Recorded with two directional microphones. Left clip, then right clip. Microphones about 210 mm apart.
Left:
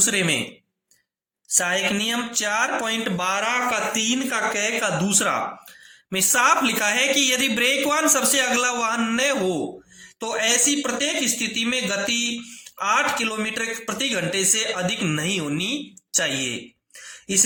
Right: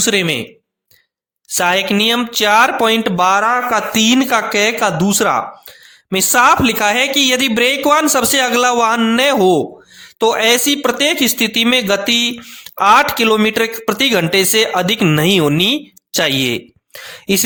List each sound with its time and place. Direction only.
0.0 s speech: 45° right (ahead or behind)
1.5 s speech: 55° right (ahead or behind)